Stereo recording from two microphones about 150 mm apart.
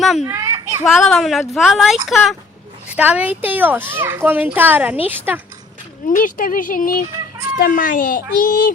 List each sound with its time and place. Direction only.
0.3 s children playing: 20° right (ahead or behind)
0.9 s a woman's voice: centre (ahead or behind)
6.1 s a child's voice: 70° left (ahead or behind)